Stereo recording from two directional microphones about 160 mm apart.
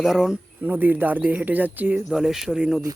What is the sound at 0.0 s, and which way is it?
Speech, 5° right (ahead or behind).